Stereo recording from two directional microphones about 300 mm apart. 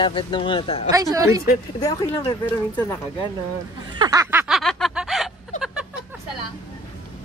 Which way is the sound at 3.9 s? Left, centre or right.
Centre.